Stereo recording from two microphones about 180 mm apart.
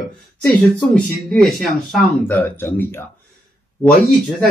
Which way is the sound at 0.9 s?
Centre (ahead or behind).